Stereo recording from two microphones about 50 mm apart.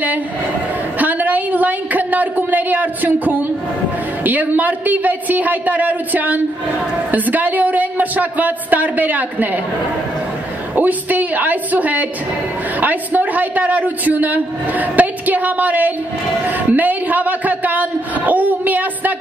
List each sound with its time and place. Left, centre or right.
0.9 s a woman's voice: right
10.8 s a man's voice: right
16.4 s a sound: right